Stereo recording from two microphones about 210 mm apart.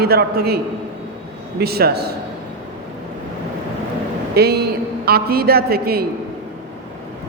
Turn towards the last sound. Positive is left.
turn(degrees=-45)  # may be behind; listen again after turning